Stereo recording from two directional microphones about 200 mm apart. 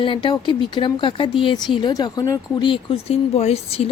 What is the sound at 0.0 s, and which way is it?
Speech, 25° left (ahead or behind).